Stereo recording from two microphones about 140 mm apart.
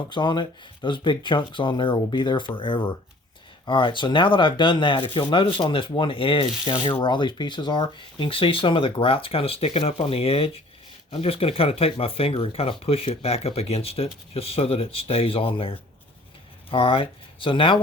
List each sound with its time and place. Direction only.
0.1 s speech: 35° left (ahead or behind)